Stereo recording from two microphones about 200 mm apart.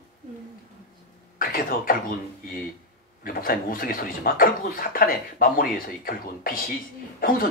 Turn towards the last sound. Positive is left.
turn(degrees=45)  # may be behind; listen again after turning